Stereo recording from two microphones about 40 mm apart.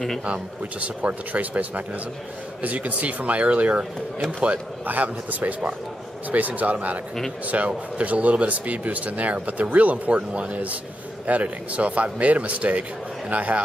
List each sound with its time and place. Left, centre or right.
0.2 s speech: right